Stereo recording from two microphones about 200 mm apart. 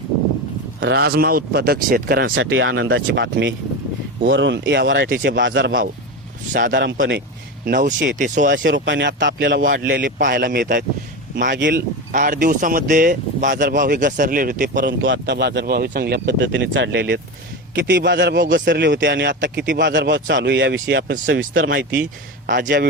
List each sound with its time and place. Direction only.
0.8 s speech: 60° right (ahead or behind)
2.3 s speech: 75° right (ahead or behind)
2.7 s a man's voice: 65° right (ahead or behind)
6.5 s speech: 40° right (ahead or behind)
8.5 s a man's voice: 65° right (ahead or behind)
9.6 s speech: 45° right (ahead or behind)
12.1 s speech: 40° right (ahead or behind)
14.8 s a man's voice: 65° right (ahead or behind)
18.4 s speech: 45° right (ahead or behind)
18.7 s a man's voice: 60° right (ahead or behind)
22.4 s speech: 45° right (ahead or behind)